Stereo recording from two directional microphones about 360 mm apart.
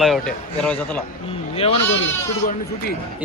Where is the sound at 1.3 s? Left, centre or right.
Centre.